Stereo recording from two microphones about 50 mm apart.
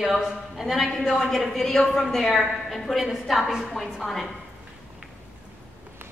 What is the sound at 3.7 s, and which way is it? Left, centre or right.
Speech, centre.